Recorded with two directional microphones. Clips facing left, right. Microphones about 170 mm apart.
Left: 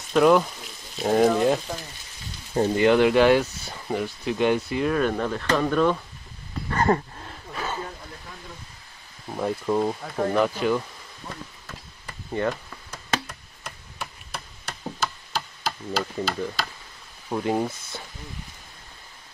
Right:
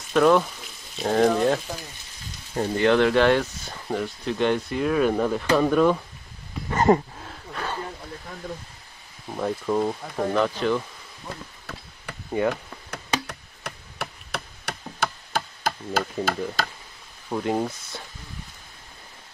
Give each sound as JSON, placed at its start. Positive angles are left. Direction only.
{"t": 0.1, "sound": "speech", "side_deg": 5}
{"t": 2.8, "sound": "speech", "side_deg": 10}
{"t": 6.7, "sound": "a sound", "side_deg": -20}
{"t": 7.2, "sound": "a sound", "side_deg": 0}
{"t": 9.3, "sound": "speech", "side_deg": 5}
{"t": 12.3, "sound": "speech", "side_deg": -10}
{"t": 12.9, "sound": "a sound", "side_deg": -65}
{"t": 16.6, "sound": "chop", "side_deg": -45}
{"t": 17.3, "sound": "speech", "side_deg": 5}